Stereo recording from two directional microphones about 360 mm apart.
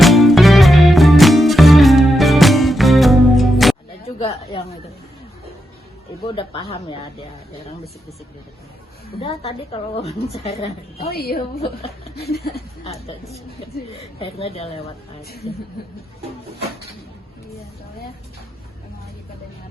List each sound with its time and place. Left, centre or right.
0.0 s music: centre
4.0 s a sound: centre
6.2 s a woman's voice: centre
9.2 s a woman's voice: centre
12.2 s chuckle: left
12.8 s a woman's voice: centre